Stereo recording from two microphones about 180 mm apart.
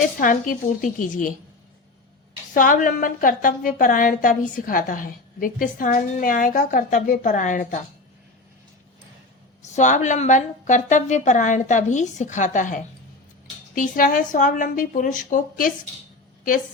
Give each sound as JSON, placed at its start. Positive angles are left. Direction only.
{"t": 0.2, "sound": "a woman's voice", "side_deg": 50}
{"t": 2.5, "sound": "a woman's voice", "side_deg": 50}
{"t": 9.6, "sound": "a woman's voice", "side_deg": 40}